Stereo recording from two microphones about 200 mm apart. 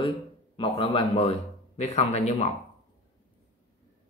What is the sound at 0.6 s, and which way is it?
A man's voice, 25° left (ahead or behind).